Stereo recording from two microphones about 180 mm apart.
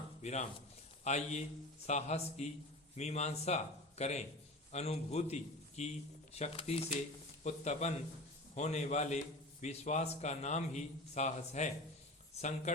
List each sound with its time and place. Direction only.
0.2 s a man's voice: 40° left (ahead or behind)